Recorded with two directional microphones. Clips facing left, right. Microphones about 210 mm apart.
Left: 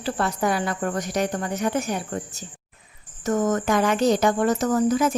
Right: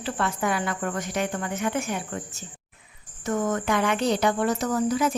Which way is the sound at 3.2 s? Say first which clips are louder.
Left 3 dB; 45° left (ahead or behind).